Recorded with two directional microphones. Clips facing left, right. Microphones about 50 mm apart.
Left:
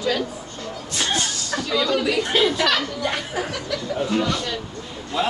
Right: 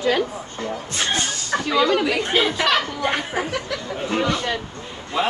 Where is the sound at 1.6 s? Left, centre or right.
Right.